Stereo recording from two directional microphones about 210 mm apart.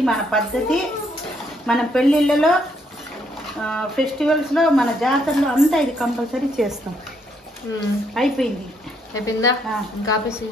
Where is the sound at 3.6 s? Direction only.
5° left (ahead or behind).